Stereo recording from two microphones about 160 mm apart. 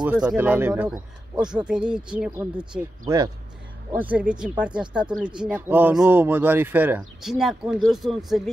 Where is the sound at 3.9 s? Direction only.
10° right (ahead or behind).